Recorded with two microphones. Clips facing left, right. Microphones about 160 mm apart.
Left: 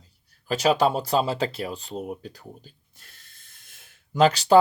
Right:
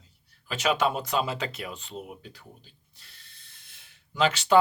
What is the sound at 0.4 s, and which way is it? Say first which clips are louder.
Speech: left 5 dB; 35° left (ahead or behind).